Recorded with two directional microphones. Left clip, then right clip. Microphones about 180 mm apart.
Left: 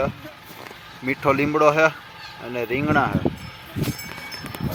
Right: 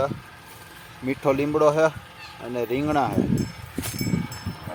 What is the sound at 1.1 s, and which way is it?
Speech, 15° right (ahead or behind).